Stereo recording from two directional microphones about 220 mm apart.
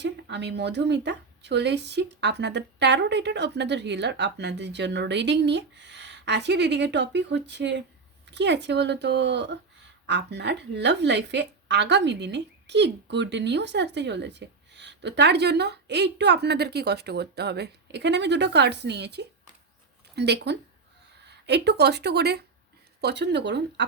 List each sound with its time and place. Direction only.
0.0 s a woman's voice: 50° right (ahead or behind)